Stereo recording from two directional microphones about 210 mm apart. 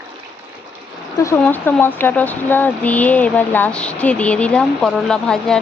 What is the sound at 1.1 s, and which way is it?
Speech, 15° left (ahead or behind).